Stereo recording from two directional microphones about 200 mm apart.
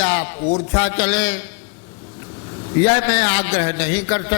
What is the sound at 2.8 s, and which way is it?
A man's voice, 15° left (ahead or behind).